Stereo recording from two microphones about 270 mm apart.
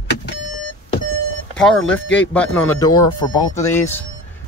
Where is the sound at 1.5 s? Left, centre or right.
Centre.